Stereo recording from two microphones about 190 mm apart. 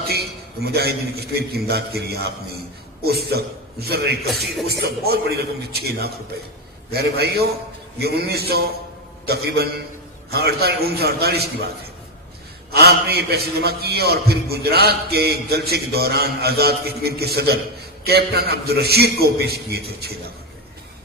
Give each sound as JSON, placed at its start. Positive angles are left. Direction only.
{"t": 0.1, "sound": "a man's voice", "side_deg": -55}
{"t": 4.3, "sound": "a man's voice", "side_deg": 0}
{"t": 4.6, "sound": "a man's voice", "side_deg": -60}
{"t": 12.7, "sound": "a man's voice", "side_deg": -55}